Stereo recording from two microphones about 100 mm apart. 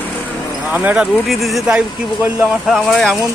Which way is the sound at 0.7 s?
15° right (ahead or behind).